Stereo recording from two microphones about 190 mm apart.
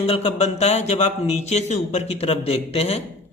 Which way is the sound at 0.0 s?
30° left (ahead or behind).